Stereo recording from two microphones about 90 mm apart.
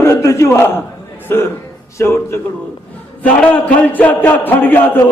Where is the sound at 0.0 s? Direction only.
30° left (ahead or behind).